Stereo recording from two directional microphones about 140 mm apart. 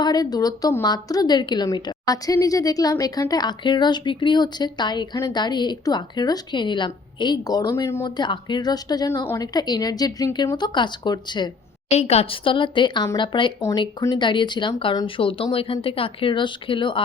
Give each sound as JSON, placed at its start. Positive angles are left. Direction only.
{"t": 0.0, "sound": "a woman's voice", "side_deg": 30}
{"t": 8.0, "sound": "a woman's voice", "side_deg": 30}
{"t": 11.9, "sound": "speech", "side_deg": 50}
{"t": 13.6, "sound": "speech", "side_deg": 20}